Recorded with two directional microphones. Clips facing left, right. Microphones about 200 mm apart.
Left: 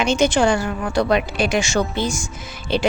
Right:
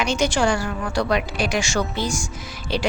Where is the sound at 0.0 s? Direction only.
25° left (ahead or behind).